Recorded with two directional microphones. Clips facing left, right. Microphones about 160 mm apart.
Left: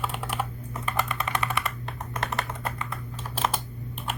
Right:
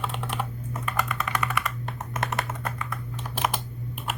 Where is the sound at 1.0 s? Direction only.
30° left (ahead or behind).